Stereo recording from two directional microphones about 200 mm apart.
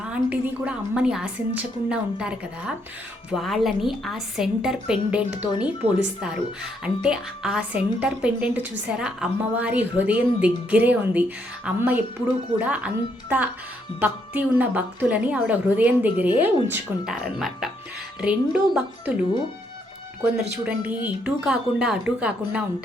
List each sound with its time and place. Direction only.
0.0 s a woman's voice: 5° right (ahead or behind)
5.8 s speech: 30° right (ahead or behind)
6.8 s a woman's voice: 5° right (ahead or behind)
14.0 s a woman's voice: 10° right (ahead or behind)
20.7 s a woman's voice: 5° right (ahead or behind)